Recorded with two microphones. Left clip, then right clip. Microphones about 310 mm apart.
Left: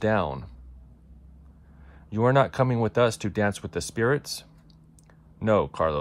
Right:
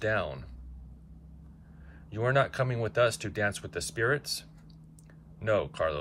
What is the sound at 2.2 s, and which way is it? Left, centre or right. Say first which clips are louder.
Speech: left 6 dB; centre.